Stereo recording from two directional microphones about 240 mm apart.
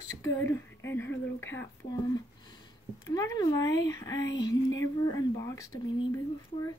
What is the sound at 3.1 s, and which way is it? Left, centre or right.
Speech, centre.